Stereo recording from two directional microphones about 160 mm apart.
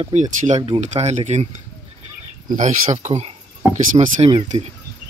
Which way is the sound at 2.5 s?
45° right (ahead or behind).